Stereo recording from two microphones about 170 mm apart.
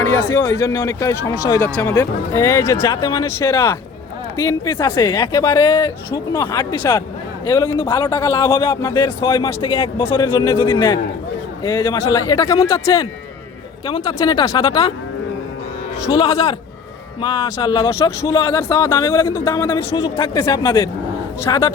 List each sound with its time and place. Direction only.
0.0 s a man's voice: 15° left (ahead or behind)
16.1 s a man's voice: 25° left (ahead or behind)